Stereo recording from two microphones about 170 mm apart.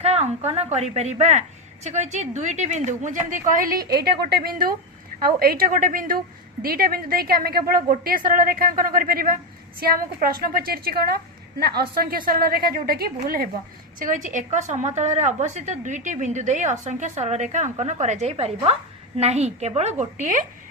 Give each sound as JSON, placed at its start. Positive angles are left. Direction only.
{"t": 0.0, "sound": "a woman's voice", "side_deg": -40}
{"t": 14.0, "sound": "a woman's voice", "side_deg": -50}